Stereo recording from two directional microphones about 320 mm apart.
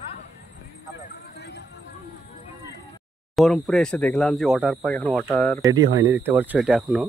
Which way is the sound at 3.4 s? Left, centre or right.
Centre.